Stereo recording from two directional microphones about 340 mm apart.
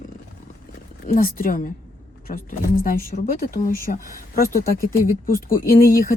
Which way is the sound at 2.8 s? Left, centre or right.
Left.